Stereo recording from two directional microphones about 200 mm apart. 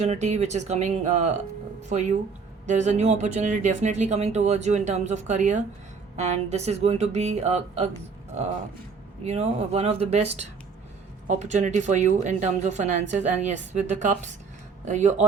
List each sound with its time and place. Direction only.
0.0 s speech: 35° right (ahead or behind)
9.2 s speech: 30° right (ahead or behind)